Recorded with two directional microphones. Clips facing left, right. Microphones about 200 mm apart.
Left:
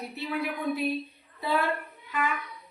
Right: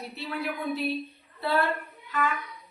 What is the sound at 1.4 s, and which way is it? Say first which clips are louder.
Speech: right 1 dB; 15° left (ahead or behind).